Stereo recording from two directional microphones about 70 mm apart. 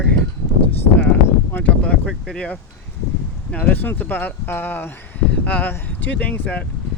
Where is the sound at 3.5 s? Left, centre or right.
Left.